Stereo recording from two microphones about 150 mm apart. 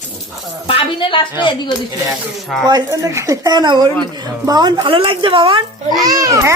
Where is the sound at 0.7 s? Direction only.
35° left (ahead or behind).